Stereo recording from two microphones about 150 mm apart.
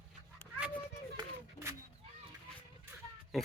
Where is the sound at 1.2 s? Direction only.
30° right (ahead or behind).